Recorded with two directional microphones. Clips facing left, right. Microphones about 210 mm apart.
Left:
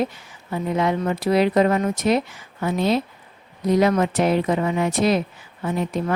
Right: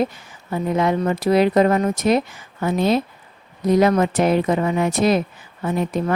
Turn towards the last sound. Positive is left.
turn(degrees=-45)  # may be behind; listen again after turning